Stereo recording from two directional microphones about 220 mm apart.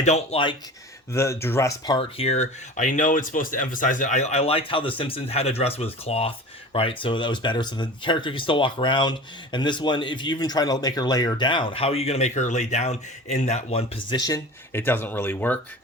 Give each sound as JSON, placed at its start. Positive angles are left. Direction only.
{"t": 0.0, "sound": "speech", "side_deg": 30}
{"t": 1.1, "sound": "speech", "side_deg": 10}
{"t": 2.0, "sound": "speech", "side_deg": 25}